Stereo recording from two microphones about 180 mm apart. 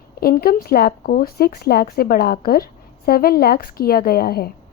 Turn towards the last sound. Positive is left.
turn(degrees=60)  # may be behind; listen again after turning